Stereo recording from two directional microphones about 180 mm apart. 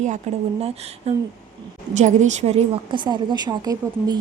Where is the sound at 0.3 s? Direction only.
40° right (ahead or behind).